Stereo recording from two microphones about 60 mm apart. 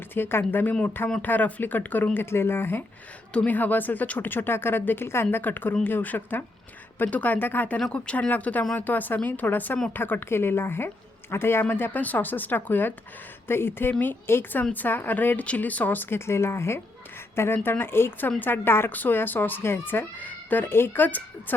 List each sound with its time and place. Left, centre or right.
0.1 s a woman's voice: left
2.1 s a woman's voice: left
3.3 s a woman's voice: left
7.9 s a woman's voice: centre